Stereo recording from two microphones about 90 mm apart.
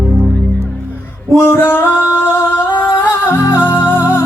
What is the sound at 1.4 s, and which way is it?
Singing, 25° left (ahead or behind).